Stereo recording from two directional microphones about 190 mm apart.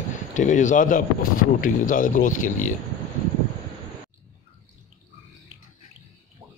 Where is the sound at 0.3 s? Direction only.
40° left (ahead or behind).